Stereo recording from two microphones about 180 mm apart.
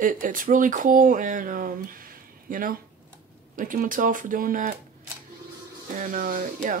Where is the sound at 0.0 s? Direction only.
50° right (ahead or behind).